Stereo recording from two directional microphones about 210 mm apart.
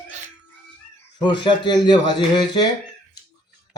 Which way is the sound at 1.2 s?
20° left (ahead or behind).